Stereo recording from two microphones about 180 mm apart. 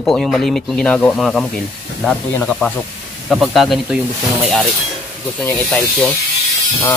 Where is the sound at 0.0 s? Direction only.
Centre (ahead or behind).